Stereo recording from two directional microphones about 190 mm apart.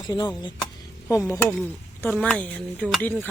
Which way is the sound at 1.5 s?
5° left (ahead or behind).